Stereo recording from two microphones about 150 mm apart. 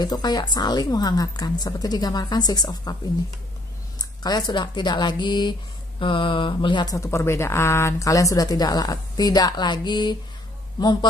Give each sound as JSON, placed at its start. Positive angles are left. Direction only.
{"t": 0.0, "sound": "speech", "side_deg": 25}
{"t": 4.0, "sound": "speech", "side_deg": 25}